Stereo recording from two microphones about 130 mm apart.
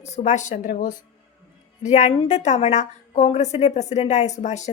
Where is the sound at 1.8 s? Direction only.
65° left (ahead or behind).